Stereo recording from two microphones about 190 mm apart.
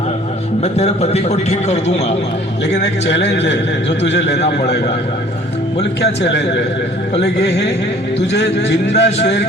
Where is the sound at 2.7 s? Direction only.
65° left (ahead or behind).